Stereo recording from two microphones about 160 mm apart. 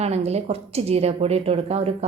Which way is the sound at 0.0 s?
40° right (ahead or behind).